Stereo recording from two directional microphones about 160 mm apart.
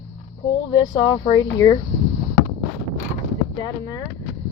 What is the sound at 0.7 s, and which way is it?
Speech, 25° left (ahead or behind).